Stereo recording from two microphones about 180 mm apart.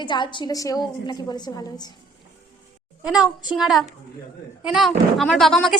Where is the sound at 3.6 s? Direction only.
Centre (ahead or behind).